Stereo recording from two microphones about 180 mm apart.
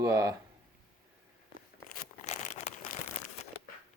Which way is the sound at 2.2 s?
40° left (ahead or behind).